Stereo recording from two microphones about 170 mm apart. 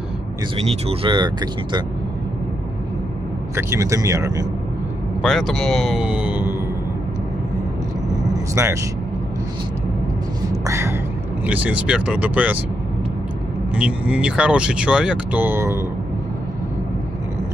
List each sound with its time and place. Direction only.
0.6 s speech: 35° right (ahead or behind)
3.5 s speech: 15° right (ahead or behind)
5.2 s speech: centre (ahead or behind)
8.6 s speech: 15° right (ahead or behind)
10.5 s a sound: 15° right (ahead or behind)
11.4 s speech: 10° right (ahead or behind)
13.7 s speech: 5° right (ahead or behind)